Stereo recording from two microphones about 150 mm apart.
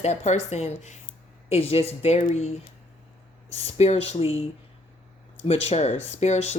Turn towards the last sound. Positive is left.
turn(degrees=45)  # may be behind; listen again after turning